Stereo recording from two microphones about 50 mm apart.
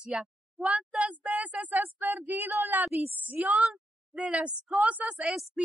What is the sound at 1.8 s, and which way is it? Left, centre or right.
Speech, right.